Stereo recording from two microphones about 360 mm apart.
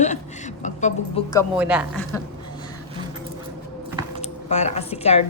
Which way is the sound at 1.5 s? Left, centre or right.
Centre.